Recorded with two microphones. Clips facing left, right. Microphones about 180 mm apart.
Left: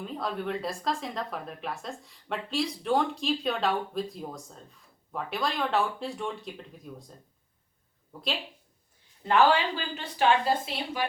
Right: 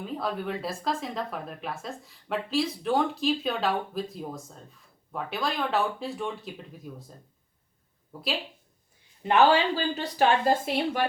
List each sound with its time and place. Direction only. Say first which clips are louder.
0.0 s speech: right 1 dB; centre (ahead or behind)
9.2 s speech: right 2 dB; 20° right (ahead or behind)
9.7 s speech: right 6 dB; 40° right (ahead or behind)